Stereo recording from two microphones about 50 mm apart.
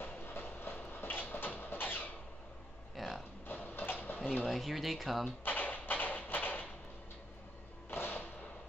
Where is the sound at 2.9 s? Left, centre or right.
Centre.